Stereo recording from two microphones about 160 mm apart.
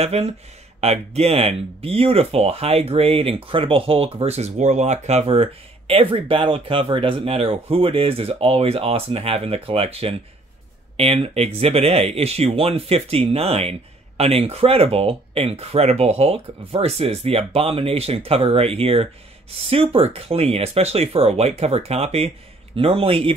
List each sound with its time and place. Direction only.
0.0 s speech: 40° right (ahead or behind)